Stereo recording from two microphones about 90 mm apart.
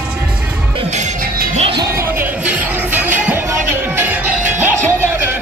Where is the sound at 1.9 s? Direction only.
25° right (ahead or behind).